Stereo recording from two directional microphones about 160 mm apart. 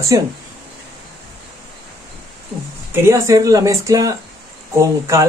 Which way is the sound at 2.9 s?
15° right (ahead or behind).